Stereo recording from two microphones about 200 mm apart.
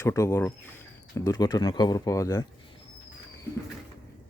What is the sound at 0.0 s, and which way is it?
Speech, 15° left (ahead or behind).